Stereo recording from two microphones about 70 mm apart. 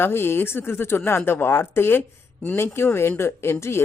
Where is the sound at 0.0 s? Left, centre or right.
Left.